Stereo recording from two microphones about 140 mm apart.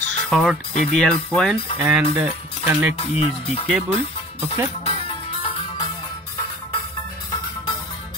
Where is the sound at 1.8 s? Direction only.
10° right (ahead or behind).